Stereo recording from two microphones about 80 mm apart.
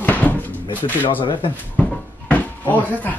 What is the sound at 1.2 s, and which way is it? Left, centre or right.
Speech, left.